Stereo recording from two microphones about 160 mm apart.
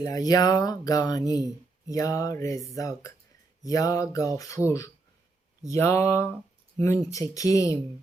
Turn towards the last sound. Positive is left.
turn(degrees=20)  # may be behind; listen again after turning